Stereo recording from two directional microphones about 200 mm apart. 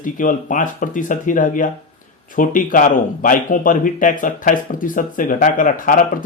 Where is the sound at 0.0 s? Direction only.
40° left (ahead or behind).